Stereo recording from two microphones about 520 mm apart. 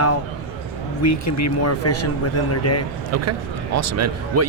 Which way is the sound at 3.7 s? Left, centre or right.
Right.